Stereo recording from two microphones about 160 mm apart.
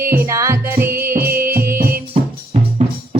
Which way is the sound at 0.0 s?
15° right (ahead or behind).